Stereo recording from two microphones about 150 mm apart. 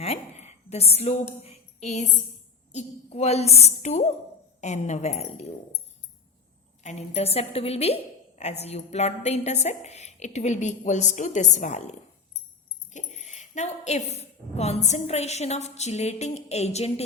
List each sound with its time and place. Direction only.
0.0 s a woman's voice: 45° left (ahead or behind)
6.8 s a woman's voice: 45° left (ahead or behind)